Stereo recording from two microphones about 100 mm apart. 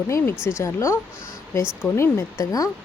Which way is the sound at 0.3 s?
10° right (ahead or behind).